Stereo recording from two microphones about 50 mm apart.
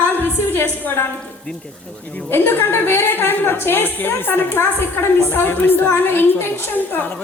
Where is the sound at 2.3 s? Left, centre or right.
Left.